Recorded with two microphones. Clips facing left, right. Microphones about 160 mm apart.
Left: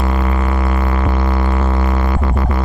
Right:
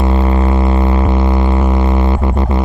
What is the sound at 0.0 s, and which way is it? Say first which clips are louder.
Music: right 4 dB; 25° right (ahead or behind).